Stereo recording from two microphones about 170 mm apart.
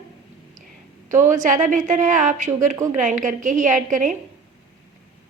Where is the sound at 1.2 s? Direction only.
45° right (ahead or behind).